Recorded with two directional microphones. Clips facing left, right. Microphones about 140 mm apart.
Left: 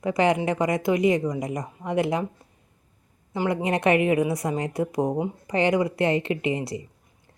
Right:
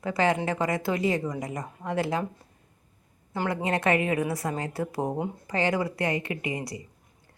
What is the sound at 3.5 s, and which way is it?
Speech, 20° left (ahead or behind).